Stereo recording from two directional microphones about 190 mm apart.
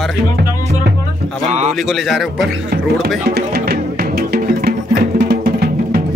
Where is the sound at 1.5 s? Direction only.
35° right (ahead or behind).